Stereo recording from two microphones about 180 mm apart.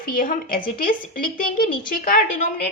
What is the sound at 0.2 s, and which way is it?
Speech, 50° left (ahead or behind).